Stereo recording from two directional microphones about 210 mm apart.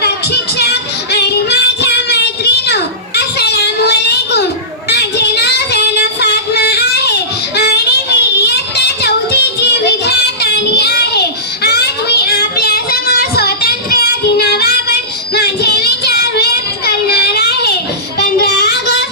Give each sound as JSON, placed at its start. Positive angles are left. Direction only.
{"t": 0.0, "sound": "child singing", "side_deg": 50}
{"t": 3.2, "sound": "a sound", "side_deg": 50}
{"t": 4.9, "sound": "child singing", "side_deg": 50}